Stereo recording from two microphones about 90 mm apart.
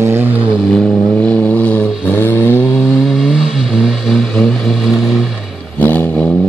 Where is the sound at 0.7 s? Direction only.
10° left (ahead or behind); by 2.8 s 25° left (ahead or behind).